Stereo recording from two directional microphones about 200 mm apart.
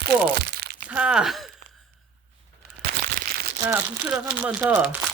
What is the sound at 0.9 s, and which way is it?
Speech, 5° right (ahead or behind).